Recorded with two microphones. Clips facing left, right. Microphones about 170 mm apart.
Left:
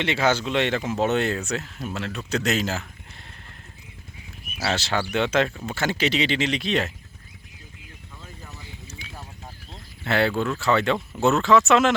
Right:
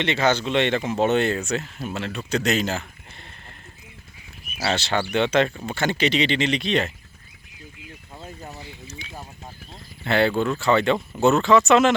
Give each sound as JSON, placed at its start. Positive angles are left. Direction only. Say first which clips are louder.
{"t": 0.0, "sound": "speech", "louder": "right 1 dB", "side_deg": 5}
{"t": 4.6, "sound": "speech", "louder": "right 2 dB", "side_deg": 0}
{"t": 8.1, "sound": "vehicle", "louder": "right 6 dB", "side_deg": -40}
{"t": 9.0, "sound": "a sound", "louder": "right 2 dB", "side_deg": 5}
{"t": 10.0, "sound": "speech", "louder": "right 2 dB", "side_deg": 0}